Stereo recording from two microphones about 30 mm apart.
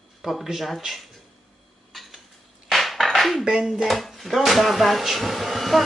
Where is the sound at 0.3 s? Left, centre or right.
Right.